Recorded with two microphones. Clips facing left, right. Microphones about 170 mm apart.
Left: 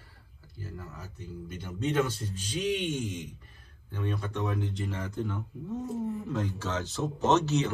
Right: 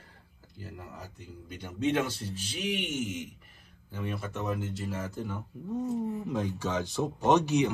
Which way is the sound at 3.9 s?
5° right (ahead or behind).